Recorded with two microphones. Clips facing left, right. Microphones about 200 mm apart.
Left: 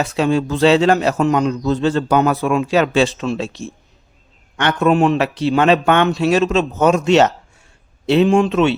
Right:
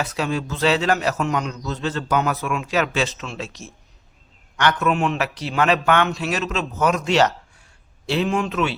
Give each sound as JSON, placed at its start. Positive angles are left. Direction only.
{"t": 0.0, "sound": "a man's voice", "side_deg": 25}